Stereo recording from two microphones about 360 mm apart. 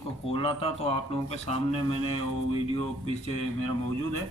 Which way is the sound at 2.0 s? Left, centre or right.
Right.